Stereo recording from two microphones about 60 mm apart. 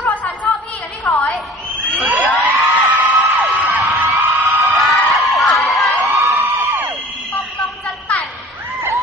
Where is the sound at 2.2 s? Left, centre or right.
Centre.